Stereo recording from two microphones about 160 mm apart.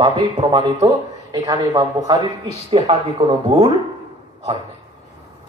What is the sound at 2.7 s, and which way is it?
Speech, 35° right (ahead or behind).